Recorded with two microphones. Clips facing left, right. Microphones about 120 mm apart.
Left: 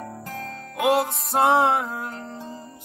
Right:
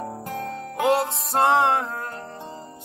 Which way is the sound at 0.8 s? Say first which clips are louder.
Even; 10° left (ahead or behind).